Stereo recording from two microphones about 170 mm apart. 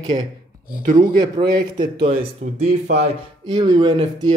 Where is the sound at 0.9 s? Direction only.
25° right (ahead or behind).